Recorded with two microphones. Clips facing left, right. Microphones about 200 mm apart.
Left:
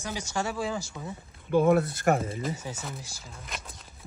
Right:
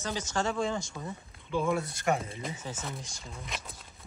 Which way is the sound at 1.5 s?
60° left (ahead or behind).